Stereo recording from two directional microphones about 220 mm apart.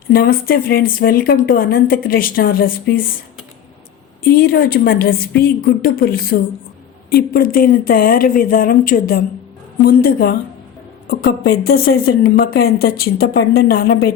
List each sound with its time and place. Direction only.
0.1 s a woman's voice: 40° left (ahead or behind)
4.2 s a woman's voice: 45° left (ahead or behind)
7.2 s a woman's voice: 40° left (ahead or behind)